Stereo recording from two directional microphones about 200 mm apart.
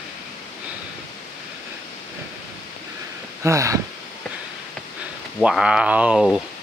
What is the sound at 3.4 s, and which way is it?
Speech, 15° right (ahead or behind).